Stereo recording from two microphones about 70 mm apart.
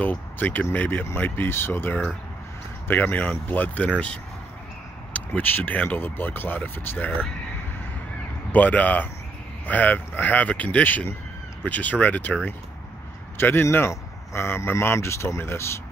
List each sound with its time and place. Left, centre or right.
0.0 s a man's voice: left
8.5 s speech: left
13.4 s a man's voice: left